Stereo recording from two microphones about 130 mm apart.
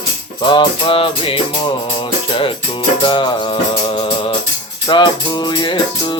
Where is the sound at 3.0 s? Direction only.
40° left (ahead or behind).